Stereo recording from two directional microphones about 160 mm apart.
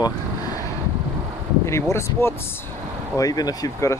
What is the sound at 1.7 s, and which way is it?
Speech, 15° left (ahead or behind).